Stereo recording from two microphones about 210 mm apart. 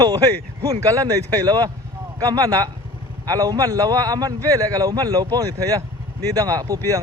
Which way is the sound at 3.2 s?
20° right (ahead or behind).